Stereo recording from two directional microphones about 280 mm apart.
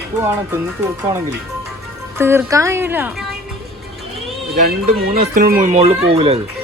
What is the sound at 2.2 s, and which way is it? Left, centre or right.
Speech, centre.